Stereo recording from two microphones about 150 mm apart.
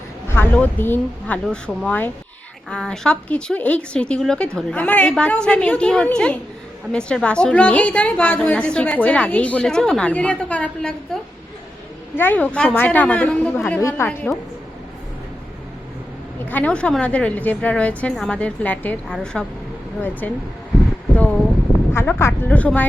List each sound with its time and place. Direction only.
0.3 s a woman's voice: 10° left (ahead or behind)
13.7 s a woman's voice: 15° left (ahead or behind)
16.5 s a woman's voice: 10° left (ahead or behind)
21.2 s a sound: 5° left (ahead or behind)
21.9 s a woman's voice: 15° left (ahead or behind)